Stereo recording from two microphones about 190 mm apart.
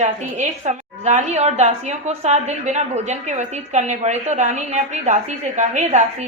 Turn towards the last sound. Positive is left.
turn(degrees=-40)  # may be behind; listen again after turning